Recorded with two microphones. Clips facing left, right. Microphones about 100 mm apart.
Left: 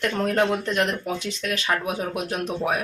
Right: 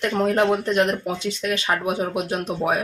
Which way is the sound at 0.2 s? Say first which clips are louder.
Right 4 dB; 15° right (ahead or behind).